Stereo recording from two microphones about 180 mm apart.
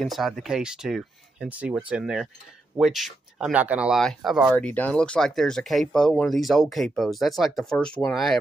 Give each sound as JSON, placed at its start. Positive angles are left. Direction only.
{"t": 0.0, "sound": "speech", "side_deg": 0}
{"t": 4.6, "sound": "speech", "side_deg": 5}